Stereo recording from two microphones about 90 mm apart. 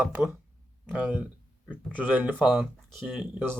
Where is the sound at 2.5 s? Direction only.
Centre (ahead or behind).